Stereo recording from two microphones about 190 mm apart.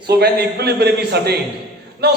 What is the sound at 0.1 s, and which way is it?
A man's voice, 60° right (ahead or behind).